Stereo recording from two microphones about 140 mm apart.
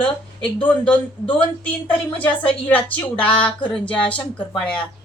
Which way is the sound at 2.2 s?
10° left (ahead or behind).